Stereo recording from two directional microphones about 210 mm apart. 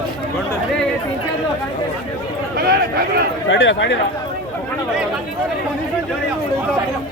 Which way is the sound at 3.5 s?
60° left (ahead or behind).